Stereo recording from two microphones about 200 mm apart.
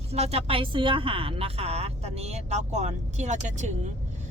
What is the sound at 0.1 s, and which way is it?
A woman's voice, 30° right (ahead or behind).